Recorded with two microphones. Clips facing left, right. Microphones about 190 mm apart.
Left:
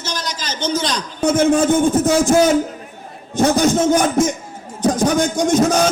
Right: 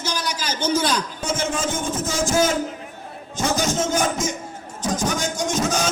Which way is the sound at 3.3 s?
60° left (ahead or behind).